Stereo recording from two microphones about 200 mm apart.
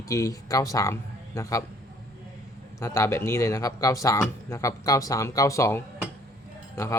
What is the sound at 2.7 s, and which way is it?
Speech, 15° left (ahead or behind).